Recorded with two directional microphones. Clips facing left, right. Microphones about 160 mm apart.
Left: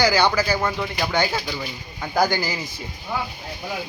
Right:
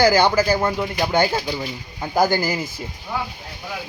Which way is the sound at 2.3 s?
50° right (ahead or behind).